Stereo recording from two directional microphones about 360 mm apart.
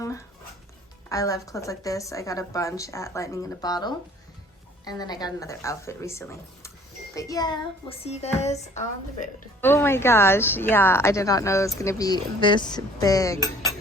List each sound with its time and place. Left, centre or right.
1.1 s a woman's voice: centre
9.6 s a woman's voice: centre